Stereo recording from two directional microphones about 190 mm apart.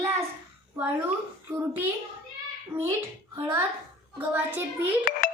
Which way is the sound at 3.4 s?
15° right (ahead or behind).